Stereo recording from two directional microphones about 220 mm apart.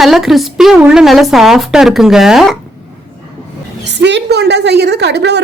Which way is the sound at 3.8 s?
50° right (ahead or behind).